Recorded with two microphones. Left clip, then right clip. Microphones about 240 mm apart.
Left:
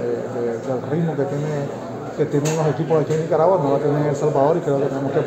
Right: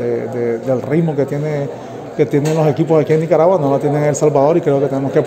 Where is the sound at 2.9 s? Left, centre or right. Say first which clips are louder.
Right 6 dB; right.